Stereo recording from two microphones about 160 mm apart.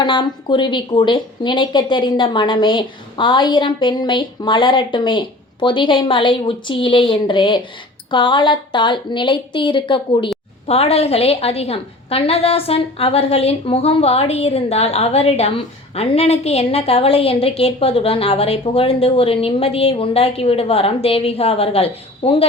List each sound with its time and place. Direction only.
0.0 s a woman's voice: 30° left (ahead or behind)